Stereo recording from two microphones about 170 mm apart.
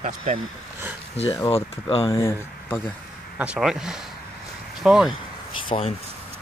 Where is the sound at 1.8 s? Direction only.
25° left (ahead or behind).